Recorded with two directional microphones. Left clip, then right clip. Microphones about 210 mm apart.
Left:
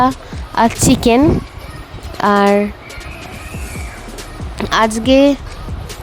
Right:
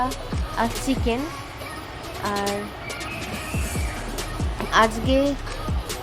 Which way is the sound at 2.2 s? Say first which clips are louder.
Left 14 dB; 50° left (ahead or behind).